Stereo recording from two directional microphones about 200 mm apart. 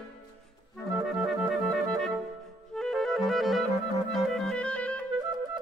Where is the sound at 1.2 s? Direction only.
Centre (ahead or behind).